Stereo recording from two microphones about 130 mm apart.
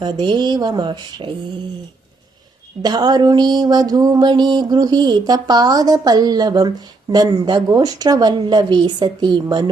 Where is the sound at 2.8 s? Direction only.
30° right (ahead or behind).